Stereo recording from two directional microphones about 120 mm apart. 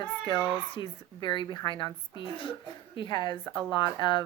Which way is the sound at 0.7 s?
40° left (ahead or behind).